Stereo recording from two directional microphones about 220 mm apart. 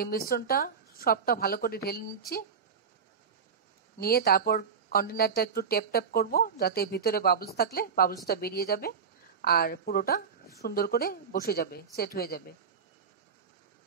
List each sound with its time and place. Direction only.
0.3 s speech: 40° left (ahead or behind)
4.0 s speech: 45° left (ahead or behind)